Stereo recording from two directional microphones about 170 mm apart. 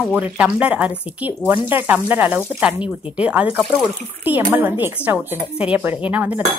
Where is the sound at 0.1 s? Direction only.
10° right (ahead or behind).